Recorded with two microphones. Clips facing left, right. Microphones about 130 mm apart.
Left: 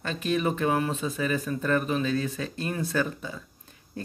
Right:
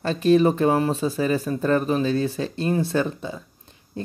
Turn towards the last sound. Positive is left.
turn(degrees=-20)  # may be behind; listen again after turning